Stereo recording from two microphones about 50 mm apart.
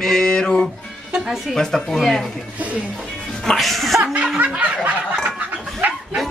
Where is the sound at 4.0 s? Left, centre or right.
Right.